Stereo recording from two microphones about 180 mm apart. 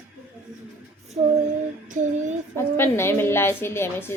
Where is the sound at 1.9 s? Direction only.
45° right (ahead or behind).